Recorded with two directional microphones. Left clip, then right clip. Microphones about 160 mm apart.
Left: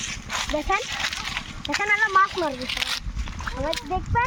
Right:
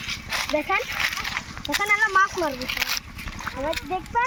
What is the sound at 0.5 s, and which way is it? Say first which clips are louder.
Speech: right 1 dB; 5° right (ahead or behind).